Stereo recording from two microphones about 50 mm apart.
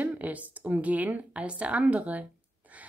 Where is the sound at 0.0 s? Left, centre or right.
Right.